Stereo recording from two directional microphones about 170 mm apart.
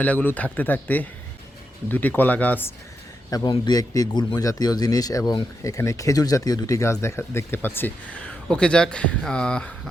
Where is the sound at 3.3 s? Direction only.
25° left (ahead or behind).